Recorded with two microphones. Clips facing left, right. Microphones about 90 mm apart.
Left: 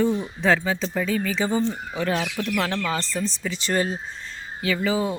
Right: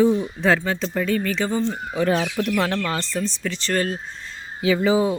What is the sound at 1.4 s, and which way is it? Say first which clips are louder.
Speech: left 3 dB; 15° left (ahead or behind).